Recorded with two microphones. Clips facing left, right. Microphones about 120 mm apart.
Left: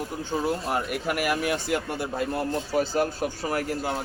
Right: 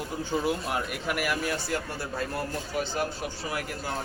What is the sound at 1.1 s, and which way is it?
Speech, 45° left (ahead or behind).